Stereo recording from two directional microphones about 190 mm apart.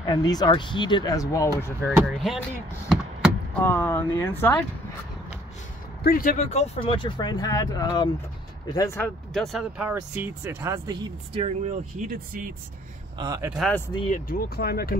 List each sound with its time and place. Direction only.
0.0 s speech: 20° left (ahead or behind)
2.0 s speech: centre (ahead or behind)
3.5 s speech: 10° left (ahead or behind)
6.0 s speech: 50° left (ahead or behind)
6.5 s speech: 35° left (ahead or behind); by 9.1 s 15° left (ahead or behind)
9.3 s speech: centre (ahead or behind)
11.3 s speech: 35° right (ahead or behind)
13.2 s speech: 20° right (ahead or behind)
13.6 s speech: 5° left (ahead or behind)
14.1 s speech: 45° left (ahead or behind)